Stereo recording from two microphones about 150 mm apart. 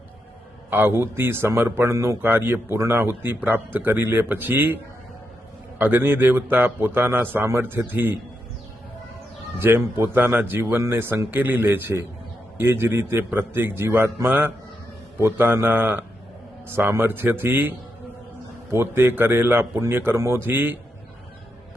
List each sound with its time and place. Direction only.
0.7 s speech: 15° right (ahead or behind)
5.8 s speech: 15° right (ahead or behind)
9.6 s speech: 15° right (ahead or behind)